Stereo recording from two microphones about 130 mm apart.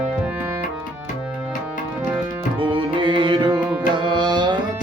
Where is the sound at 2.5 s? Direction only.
40° right (ahead or behind).